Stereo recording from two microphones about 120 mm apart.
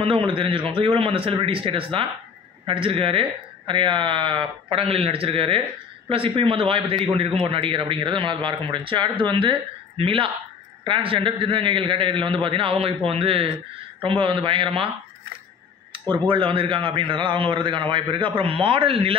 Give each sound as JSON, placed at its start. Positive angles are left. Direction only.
{"t": 0.0, "sound": "a man's voice", "side_deg": -45}
{"t": 15.9, "sound": "a man's voice", "side_deg": -45}